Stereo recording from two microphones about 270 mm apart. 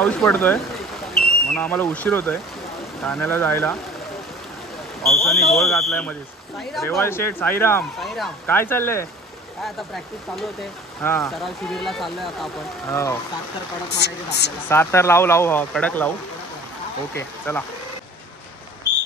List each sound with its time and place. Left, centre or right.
0.0 s speech: centre
5.0 s speech: centre
13.8 s speech: left
14.7 s speech: centre
17.1 s speech: centre